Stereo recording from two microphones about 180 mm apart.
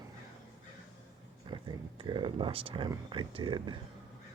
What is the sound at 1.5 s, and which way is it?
Speech, 25° right (ahead or behind).